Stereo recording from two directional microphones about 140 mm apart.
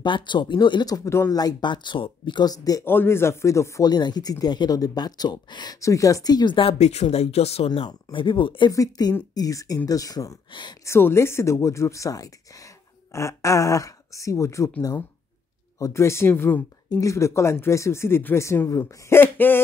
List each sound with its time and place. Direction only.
0.0 s speech: 35° left (ahead or behind)
2.9 s speech: 15° left (ahead or behind)
10.9 s speech: 15° left (ahead or behind)